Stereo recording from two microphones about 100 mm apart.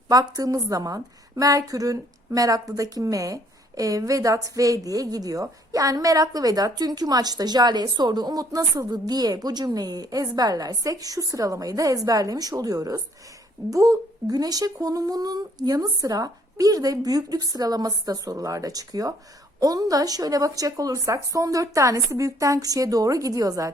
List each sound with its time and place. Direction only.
0.1 s a woman's voice: 35° right (ahead or behind)